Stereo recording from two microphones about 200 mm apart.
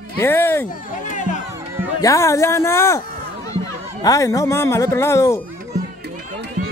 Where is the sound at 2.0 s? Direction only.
15° left (ahead or behind).